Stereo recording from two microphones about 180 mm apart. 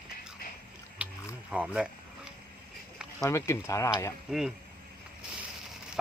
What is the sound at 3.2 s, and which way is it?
Speech, 15° left (ahead or behind).